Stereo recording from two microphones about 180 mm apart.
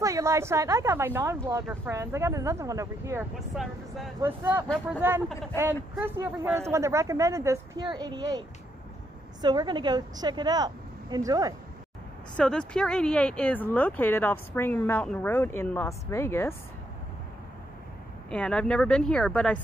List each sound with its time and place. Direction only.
0.0 s speech: 15° right (ahead or behind)
3.3 s speech: centre (ahead or behind)
4.2 s a woman's voice: 15° right (ahead or behind)
12.4 s speech: 5° left (ahead or behind)
18.3 s speech: 5° left (ahead or behind)